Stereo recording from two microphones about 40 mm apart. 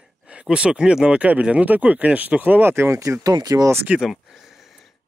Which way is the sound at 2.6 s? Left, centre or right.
Right.